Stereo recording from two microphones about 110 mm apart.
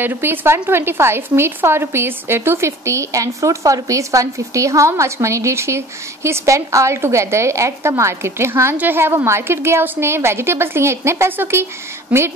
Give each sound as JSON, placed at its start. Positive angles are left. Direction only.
{"t": 0.0, "sound": "a woman's voice", "side_deg": -20}